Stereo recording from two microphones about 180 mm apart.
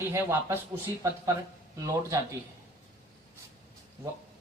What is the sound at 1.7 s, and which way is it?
Speech, 20° right (ahead or behind).